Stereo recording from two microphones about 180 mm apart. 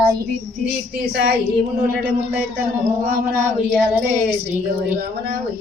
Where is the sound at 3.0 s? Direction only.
55° right (ahead or behind).